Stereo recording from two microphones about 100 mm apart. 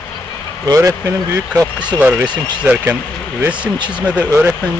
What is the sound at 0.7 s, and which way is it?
Speech, 30° right (ahead or behind).